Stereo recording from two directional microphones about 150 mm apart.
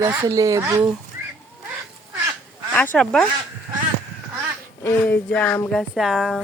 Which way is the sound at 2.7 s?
10° left (ahead or behind).